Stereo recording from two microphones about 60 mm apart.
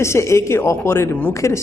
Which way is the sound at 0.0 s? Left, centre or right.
Left.